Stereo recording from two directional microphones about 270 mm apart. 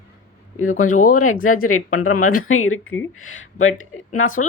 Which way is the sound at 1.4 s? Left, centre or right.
Left.